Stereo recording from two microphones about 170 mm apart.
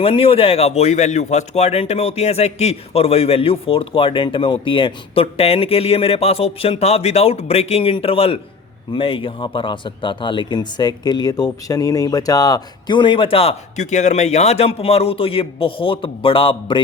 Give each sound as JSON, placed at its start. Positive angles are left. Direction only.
{"t": 0.0, "sound": "speech", "side_deg": 35}